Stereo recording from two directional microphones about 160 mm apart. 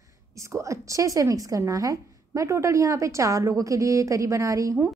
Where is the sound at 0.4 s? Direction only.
20° right (ahead or behind).